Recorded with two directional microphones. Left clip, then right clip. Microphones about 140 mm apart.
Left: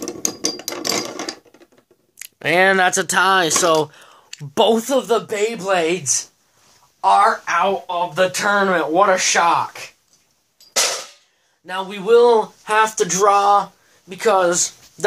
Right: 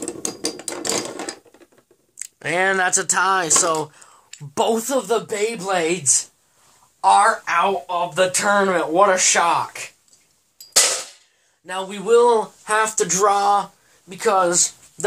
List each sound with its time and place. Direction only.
0.3 s ratchet: centre (ahead or behind)
0.9 s mechanisms: 5° left (ahead or behind)
2.3 s speech: 40° left (ahead or behind)
3.6 s speech: 50° left (ahead or behind)
4.4 s speech: 35° left (ahead or behind); by 9.8 s centre (ahead or behind)
11.6 s speech: 15° left (ahead or behind)
14.0 s speech: 30° left (ahead or behind)